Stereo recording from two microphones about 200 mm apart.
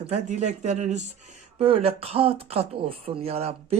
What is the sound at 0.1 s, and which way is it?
Speech, 35° right (ahead or behind).